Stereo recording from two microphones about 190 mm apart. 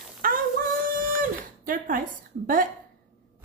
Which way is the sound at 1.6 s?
45° right (ahead or behind).